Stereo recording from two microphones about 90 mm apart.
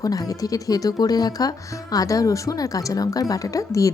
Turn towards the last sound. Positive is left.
turn(degrees=40)  # may be behind; listen again after turning